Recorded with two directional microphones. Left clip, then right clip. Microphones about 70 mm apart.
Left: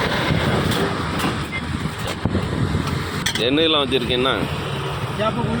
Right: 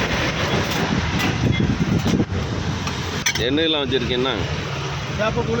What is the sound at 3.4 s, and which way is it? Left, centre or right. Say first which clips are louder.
Speech: left 4 dB; centre.